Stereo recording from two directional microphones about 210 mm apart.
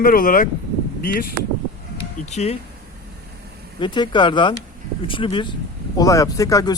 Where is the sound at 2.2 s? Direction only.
30° left (ahead or behind).